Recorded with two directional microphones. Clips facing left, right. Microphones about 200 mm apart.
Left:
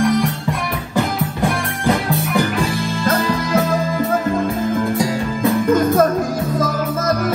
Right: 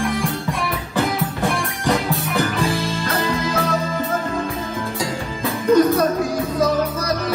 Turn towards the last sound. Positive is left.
turn(degrees=50)  # may be behind; listen again after turning